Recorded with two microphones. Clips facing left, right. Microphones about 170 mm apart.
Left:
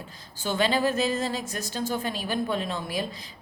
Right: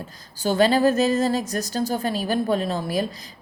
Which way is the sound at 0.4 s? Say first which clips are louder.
Right 7 dB; 40° right (ahead or behind).